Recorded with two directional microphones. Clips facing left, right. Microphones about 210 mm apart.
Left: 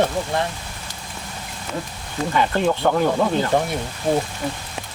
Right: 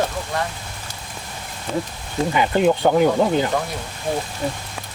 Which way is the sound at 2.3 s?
10° right (ahead or behind).